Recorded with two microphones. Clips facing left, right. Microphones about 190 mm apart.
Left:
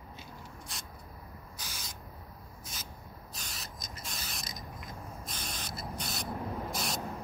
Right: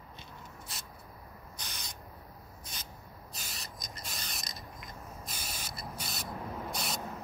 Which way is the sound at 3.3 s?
Centre (ahead or behind).